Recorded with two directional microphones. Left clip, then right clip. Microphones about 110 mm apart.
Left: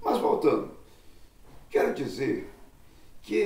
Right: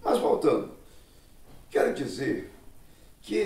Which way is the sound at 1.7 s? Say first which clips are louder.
Even; 30° right (ahead or behind).